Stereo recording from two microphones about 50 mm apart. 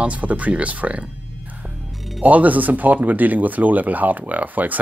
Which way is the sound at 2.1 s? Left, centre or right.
Right.